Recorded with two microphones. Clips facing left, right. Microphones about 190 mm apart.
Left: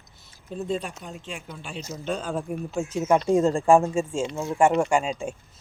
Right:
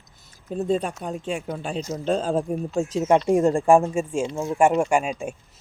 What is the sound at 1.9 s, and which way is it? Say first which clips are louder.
Speech: right 6 dB; 30° right (ahead or behind).